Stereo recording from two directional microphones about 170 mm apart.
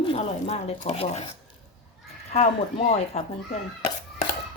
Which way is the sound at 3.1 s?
40° left (ahead or behind).